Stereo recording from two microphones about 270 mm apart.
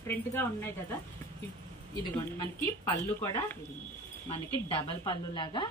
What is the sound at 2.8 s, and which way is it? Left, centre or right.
Speech, centre.